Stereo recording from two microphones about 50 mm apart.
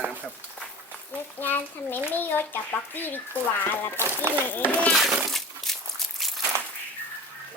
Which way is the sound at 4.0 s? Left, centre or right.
Right.